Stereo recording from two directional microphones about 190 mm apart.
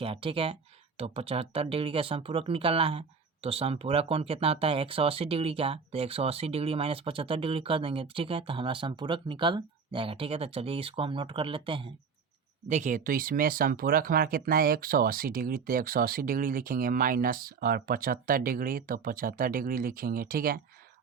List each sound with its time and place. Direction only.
0.0 s speech: 30° right (ahead or behind)
12.6 s speech: 40° right (ahead or behind)